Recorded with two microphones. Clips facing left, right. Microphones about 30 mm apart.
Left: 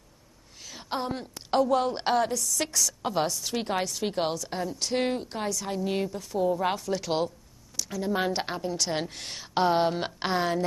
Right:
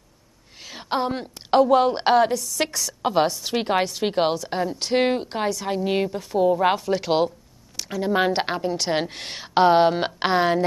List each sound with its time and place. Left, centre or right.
0.7 s a woman's voice: right